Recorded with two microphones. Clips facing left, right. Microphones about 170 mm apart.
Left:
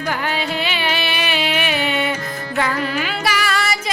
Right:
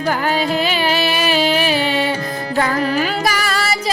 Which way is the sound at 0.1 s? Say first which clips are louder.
Right 5 dB; 40° right (ahead or behind).